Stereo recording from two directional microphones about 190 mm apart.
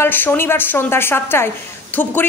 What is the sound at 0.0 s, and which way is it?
A woman's voice, 10° left (ahead or behind).